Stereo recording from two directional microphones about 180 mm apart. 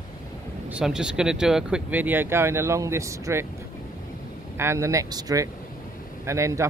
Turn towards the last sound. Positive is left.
turn(degrees=-15)  # may be behind; listen again after turning